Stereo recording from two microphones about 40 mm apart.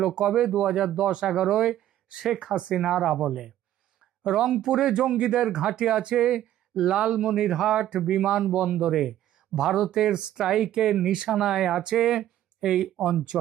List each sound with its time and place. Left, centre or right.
0.0 s speech: centre
9.6 s speech: centre
13.3 s speech: centre